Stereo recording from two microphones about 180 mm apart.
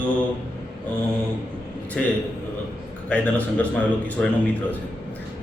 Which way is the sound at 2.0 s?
5° left (ahead or behind).